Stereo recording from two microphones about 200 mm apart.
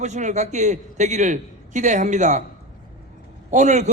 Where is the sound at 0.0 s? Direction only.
35° right (ahead or behind).